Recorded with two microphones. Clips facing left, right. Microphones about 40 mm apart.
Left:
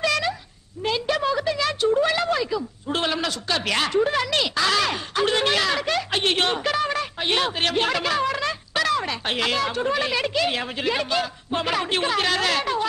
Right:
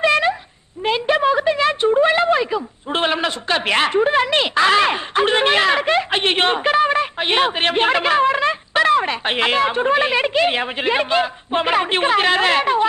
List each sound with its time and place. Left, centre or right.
0.0 s cat: right
0.8 s a woman's voice: right